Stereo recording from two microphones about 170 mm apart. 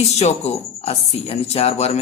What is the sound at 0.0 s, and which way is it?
Speech, 40° left (ahead or behind).